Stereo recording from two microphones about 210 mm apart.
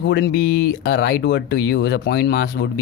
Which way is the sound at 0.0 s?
55° left (ahead or behind).